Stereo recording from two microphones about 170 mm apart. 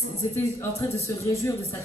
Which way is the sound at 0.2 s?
15° left (ahead or behind).